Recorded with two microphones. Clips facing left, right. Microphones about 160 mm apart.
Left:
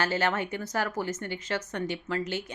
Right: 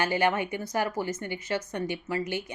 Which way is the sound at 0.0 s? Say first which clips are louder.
Right 2 dB; 15° right (ahead or behind).